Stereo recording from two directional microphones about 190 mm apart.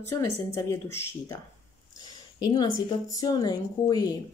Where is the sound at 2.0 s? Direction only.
20° left (ahead or behind).